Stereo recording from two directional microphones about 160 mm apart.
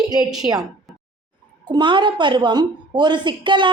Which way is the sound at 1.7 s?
30° right (ahead or behind).